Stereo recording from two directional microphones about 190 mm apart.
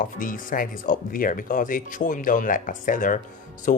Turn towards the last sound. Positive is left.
turn(degrees=45)  # may be behind; listen again after turning